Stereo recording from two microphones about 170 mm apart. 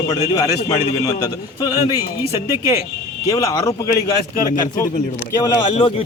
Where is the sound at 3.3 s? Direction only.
20° left (ahead or behind).